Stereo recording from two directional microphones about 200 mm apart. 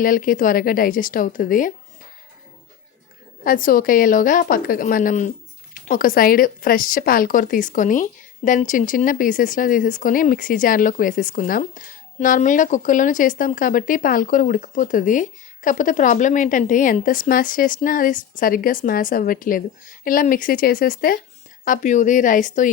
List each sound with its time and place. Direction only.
0.0 s speech: 45° left (ahead or behind)
3.4 s speech: 45° left (ahead or behind)